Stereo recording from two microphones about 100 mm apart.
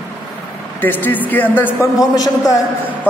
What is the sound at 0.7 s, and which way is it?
A man's voice, 20° left (ahead or behind).